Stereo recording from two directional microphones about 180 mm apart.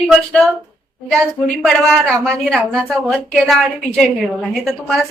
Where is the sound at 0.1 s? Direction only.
5° left (ahead or behind).